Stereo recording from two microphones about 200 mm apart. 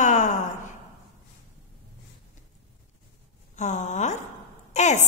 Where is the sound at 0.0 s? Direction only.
35° left (ahead or behind).